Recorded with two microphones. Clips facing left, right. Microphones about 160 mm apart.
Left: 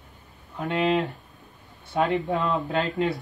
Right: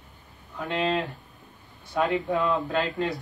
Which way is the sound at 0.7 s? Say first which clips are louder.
Left 3 dB; centre (ahead or behind).